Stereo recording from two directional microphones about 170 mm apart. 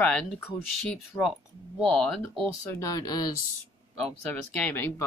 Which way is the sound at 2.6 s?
20° left (ahead or behind).